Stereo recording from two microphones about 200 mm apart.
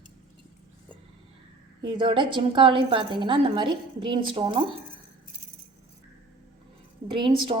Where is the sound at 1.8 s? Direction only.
25° right (ahead or behind).